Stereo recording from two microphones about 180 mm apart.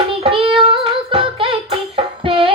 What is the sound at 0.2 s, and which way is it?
Music, 30° right (ahead or behind).